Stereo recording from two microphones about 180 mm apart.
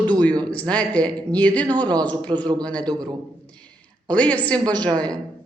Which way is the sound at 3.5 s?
5° left (ahead or behind).